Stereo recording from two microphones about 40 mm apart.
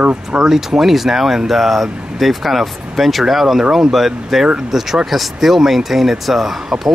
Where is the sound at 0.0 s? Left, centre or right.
Right.